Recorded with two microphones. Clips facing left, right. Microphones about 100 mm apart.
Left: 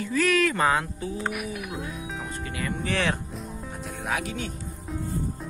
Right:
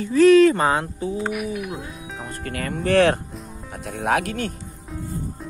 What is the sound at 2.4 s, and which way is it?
Speech, 55° right (ahead or behind).